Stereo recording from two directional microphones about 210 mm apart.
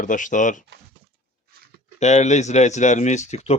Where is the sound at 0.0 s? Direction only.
40° left (ahead or behind).